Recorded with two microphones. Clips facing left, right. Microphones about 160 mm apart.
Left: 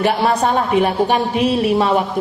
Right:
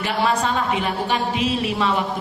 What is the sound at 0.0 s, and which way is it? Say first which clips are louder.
A woman's voice: left 5 dB; 50° left (ahead or behind).